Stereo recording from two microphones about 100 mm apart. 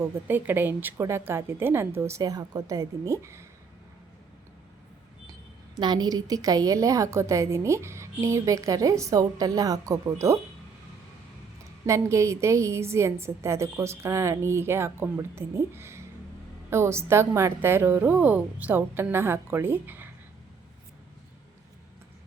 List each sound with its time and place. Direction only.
0.0 s a woman's voice: 20° right (ahead or behind)
5.7 s a woman's voice: 45° right (ahead or behind)
11.9 s a woman's voice: 30° right (ahead or behind)